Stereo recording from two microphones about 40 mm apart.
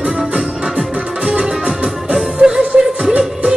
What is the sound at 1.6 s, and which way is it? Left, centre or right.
Music, centre.